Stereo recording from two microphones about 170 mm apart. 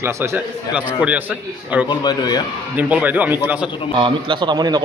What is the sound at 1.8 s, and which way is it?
Speech, 25° left (ahead or behind).